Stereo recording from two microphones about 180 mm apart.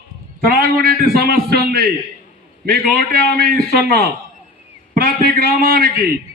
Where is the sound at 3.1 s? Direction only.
60° right (ahead or behind).